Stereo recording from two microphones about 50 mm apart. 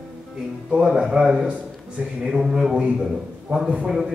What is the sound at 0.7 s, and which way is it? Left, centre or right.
A man's voice, centre.